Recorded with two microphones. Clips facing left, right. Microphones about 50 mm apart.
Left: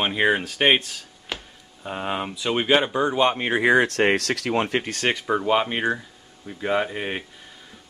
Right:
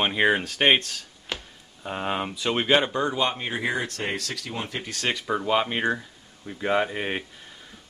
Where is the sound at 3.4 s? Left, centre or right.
Left.